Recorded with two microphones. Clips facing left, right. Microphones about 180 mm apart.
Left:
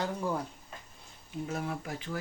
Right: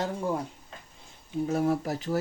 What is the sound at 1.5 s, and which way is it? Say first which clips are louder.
Speech: right 10 dB; 35° right (ahead or behind).